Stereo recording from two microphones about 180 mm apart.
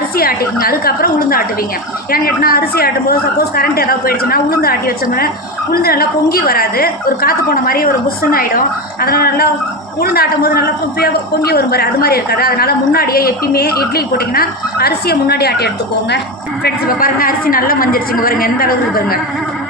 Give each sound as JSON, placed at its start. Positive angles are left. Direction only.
{"t": 0.2, "sound": "a woman's voice", "side_deg": 55}
{"t": 16.6, "sound": "a woman's voice", "side_deg": 55}